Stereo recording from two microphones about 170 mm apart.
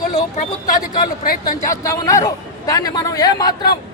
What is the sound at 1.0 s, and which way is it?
Speech, 60° left (ahead or behind).